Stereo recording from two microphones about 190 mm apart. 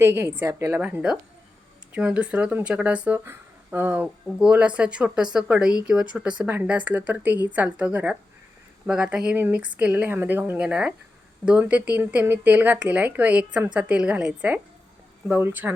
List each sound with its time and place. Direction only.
0.0 s speech: 15° right (ahead or behind)
8.9 s speech: 5° right (ahead or behind)